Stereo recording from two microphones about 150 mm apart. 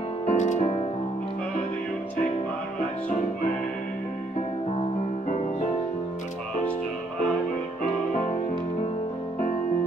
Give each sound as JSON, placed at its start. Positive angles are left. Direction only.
{"t": 0.3, "sound": "music", "side_deg": 50}